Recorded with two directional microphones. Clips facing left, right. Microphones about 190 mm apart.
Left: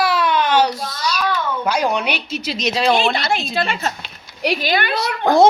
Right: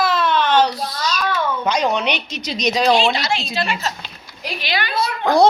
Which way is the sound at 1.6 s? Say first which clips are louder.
Even; 10° left (ahead or behind).